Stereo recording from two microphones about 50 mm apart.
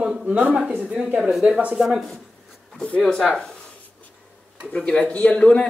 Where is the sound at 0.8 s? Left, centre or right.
Centre.